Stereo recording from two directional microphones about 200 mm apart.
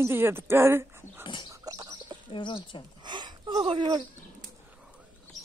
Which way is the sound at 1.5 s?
20° right (ahead or behind).